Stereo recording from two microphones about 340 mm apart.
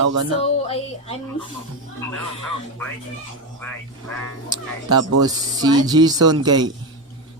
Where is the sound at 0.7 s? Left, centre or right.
Centre.